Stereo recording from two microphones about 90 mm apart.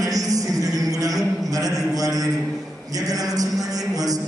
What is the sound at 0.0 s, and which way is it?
Music, 40° right (ahead or behind).